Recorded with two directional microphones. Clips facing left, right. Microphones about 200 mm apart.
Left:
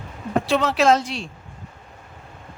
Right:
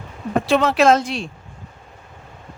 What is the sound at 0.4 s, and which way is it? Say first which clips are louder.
Speech: right 3 dB; 55° right (ahead or behind).